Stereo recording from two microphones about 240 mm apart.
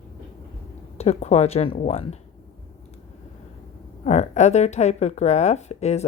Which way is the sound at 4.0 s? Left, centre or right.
Left.